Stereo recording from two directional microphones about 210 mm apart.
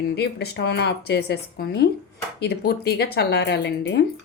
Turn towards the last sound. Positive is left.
turn(degrees=55)  # may be behind; listen again after turning